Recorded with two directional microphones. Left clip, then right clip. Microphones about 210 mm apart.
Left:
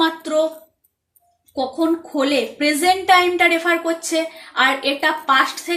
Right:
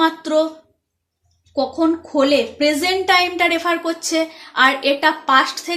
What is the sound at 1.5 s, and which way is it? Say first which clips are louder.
Speech: right 2 dB; 45° right (ahead or behind).